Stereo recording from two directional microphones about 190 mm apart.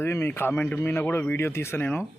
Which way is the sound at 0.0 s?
10° left (ahead or behind).